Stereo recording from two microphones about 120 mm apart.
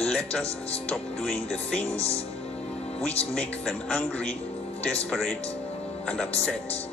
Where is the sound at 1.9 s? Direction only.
55° left (ahead or behind).